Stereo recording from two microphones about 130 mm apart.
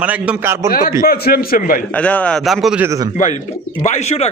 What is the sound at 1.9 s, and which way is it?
Speech, 10° left (ahead or behind).